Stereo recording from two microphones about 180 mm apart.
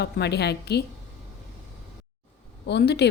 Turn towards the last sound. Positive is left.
turn(degrees=65)  # may be behind; listen again after turning